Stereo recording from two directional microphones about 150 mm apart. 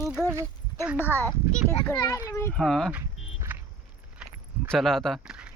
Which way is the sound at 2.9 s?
15° right (ahead or behind).